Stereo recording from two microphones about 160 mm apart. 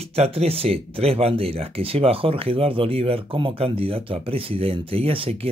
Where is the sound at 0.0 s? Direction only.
40° right (ahead or behind).